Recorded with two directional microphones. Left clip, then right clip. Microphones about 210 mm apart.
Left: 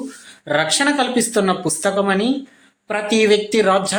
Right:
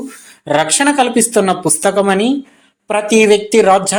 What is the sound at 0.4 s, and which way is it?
A man's voice, 20° right (ahead or behind).